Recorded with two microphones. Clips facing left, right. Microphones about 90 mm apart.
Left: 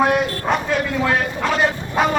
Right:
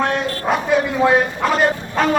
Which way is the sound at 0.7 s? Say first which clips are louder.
Right 4 dB; 20° right (ahead or behind).